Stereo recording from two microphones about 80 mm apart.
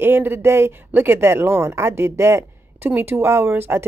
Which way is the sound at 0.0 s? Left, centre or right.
Right.